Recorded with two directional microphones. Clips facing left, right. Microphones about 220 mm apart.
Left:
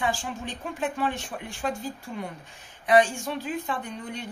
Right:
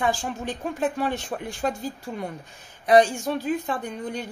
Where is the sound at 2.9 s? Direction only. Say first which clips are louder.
Right 3 dB; 40° right (ahead or behind).